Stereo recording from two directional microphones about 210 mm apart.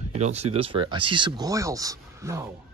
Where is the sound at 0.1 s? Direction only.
30° right (ahead or behind).